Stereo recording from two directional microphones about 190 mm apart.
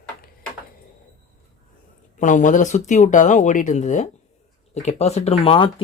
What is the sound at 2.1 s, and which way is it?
Speech, 40° left (ahead or behind).